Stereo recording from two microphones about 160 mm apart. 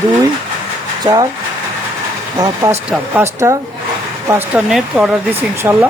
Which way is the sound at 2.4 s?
20° right (ahead or behind).